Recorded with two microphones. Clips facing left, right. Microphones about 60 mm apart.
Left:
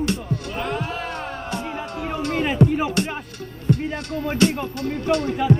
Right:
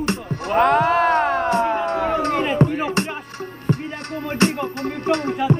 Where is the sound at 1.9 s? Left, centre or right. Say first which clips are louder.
Right 7 dB; right.